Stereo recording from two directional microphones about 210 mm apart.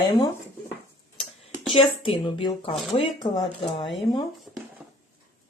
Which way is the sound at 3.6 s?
Centre (ahead or behind).